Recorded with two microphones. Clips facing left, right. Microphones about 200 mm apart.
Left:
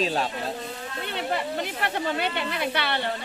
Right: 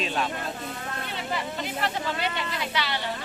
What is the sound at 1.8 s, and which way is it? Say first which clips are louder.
A woman's voice: left 2 dB; 60° left (ahead or behind).